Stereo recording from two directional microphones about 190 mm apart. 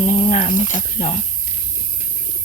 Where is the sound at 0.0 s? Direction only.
30° left (ahead or behind).